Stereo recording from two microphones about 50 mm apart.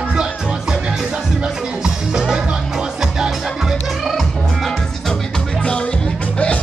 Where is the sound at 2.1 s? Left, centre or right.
Centre.